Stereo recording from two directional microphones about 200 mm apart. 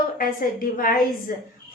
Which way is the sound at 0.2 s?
45° left (ahead or behind).